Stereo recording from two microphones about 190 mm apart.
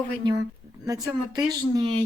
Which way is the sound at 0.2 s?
25° right (ahead or behind).